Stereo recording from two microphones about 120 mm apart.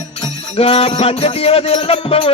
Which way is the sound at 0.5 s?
55° left (ahead or behind).